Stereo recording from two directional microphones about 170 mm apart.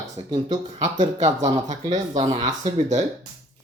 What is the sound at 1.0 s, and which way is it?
Speech, 25° right (ahead or behind).